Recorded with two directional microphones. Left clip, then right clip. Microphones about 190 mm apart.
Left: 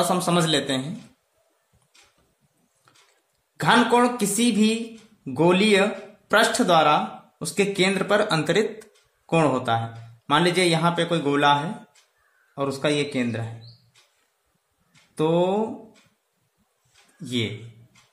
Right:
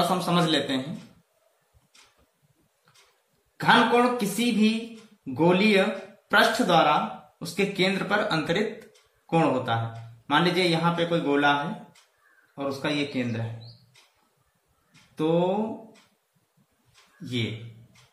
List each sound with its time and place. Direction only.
0.1 s speech: 55° left (ahead or behind)
3.5 s speech: 60° left (ahead or behind)
12.5 s speech: 60° left (ahead or behind)
15.1 s speech: 60° left (ahead or behind)